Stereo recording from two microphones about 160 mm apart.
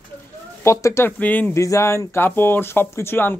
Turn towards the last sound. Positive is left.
turn(degrees=15)  # may be behind; listen again after turning